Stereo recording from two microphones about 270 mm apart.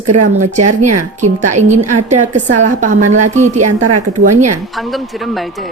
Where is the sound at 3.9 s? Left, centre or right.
Right.